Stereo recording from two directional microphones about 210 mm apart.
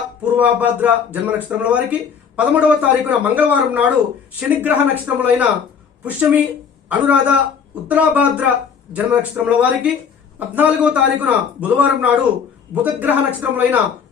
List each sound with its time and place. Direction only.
0.2 s speech: 5° right (ahead or behind)